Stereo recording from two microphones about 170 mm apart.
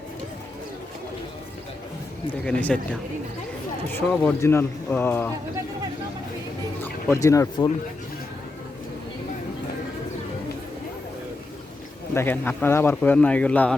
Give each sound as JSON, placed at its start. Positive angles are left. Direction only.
{"t": 2.4, "sound": "a man's voice", "side_deg": 5}
{"t": 4.2, "sound": "a man's voice", "side_deg": 10}
{"t": 6.8, "sound": "speech", "side_deg": 15}
{"t": 12.1, "sound": "a man's voice", "side_deg": 10}